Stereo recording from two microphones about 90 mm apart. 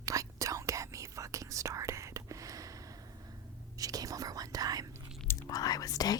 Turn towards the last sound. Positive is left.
turn(degrees=40)  # may be behind; listen again after turning